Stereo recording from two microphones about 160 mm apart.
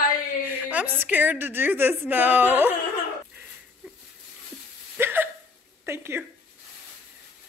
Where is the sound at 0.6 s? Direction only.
10° right (ahead or behind).